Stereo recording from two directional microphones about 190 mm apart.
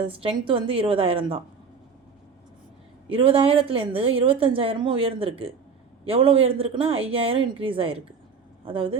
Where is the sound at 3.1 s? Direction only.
30° right (ahead or behind).